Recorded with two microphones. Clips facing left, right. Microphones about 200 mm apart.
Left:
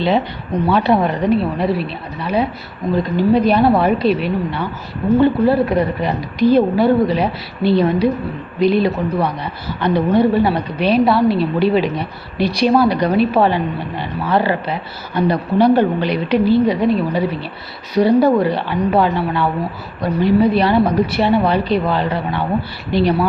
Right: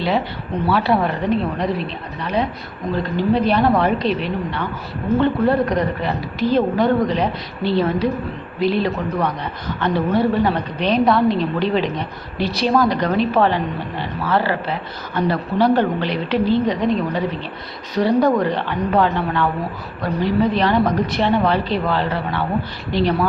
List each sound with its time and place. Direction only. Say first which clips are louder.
0.7 s speech: left 3 dB; 20° left (ahead or behind)
1.4 s speech: left 3 dB; 5° left (ahead or behind)